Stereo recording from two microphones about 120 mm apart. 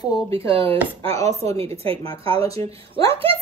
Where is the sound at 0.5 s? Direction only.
50° right (ahead or behind).